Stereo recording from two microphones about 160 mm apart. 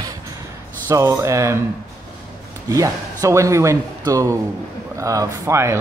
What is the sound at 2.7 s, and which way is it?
Speech, 20° right (ahead or behind).